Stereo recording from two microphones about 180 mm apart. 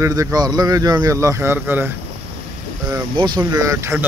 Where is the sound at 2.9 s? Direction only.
25° right (ahead or behind).